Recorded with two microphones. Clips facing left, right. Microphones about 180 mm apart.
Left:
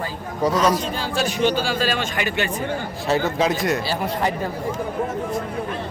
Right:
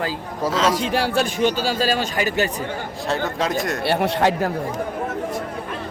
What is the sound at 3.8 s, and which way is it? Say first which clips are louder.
Speech: right 4 dB; 70° right (ahead or behind).